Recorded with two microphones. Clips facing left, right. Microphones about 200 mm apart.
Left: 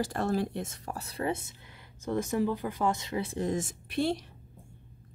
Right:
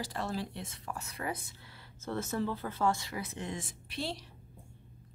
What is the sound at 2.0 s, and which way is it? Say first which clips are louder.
Speech: left 5 dB; 15° left (ahead or behind).